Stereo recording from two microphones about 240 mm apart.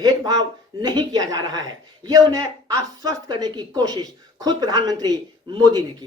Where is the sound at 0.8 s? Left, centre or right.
Centre.